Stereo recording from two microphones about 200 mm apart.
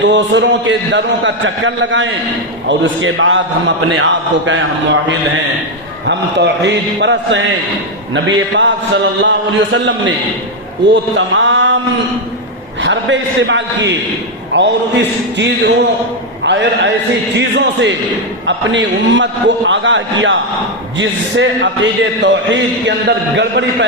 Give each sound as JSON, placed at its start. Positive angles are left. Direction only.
{"t": 0.0, "sound": "a man's voice", "side_deg": -65}
{"t": 11.1, "sound": "mantra", "side_deg": -70}
{"t": 12.8, "sound": "a man's voice", "side_deg": -65}